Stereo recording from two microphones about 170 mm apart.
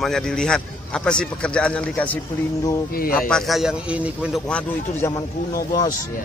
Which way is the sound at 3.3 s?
Centre (ahead or behind).